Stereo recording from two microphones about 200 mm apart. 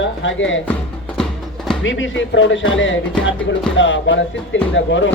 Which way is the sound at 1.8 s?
70° left (ahead or behind).